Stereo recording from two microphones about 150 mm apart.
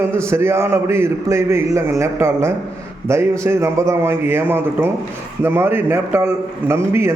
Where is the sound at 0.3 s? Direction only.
15° right (ahead or behind).